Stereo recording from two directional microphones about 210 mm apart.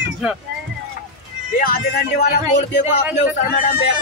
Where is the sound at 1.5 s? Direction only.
45° left (ahead or behind).